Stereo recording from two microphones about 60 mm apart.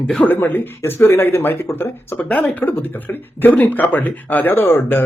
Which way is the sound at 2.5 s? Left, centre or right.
Left.